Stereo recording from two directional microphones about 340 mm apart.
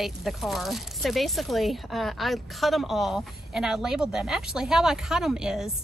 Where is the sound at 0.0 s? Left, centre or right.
Centre.